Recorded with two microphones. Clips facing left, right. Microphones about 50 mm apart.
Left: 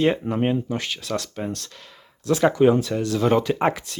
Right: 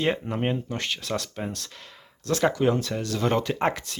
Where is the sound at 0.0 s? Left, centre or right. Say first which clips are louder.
Left 5 dB; centre.